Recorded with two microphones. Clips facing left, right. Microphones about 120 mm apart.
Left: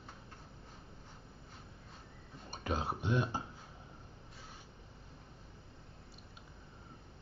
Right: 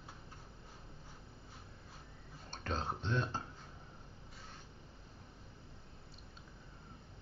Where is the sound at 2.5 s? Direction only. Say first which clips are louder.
Left 3 dB; 10° left (ahead or behind).